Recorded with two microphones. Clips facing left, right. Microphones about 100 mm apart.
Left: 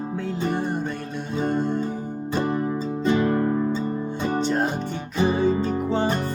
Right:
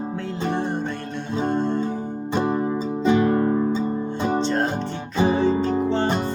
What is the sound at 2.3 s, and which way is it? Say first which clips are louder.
Music: right 2 dB; 5° right (ahead or behind).